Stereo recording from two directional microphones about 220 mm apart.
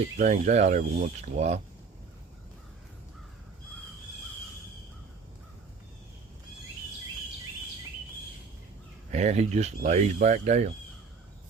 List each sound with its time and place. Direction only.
0.2 s speech: 30° right (ahead or behind)
9.1 s speech: 30° right (ahead or behind)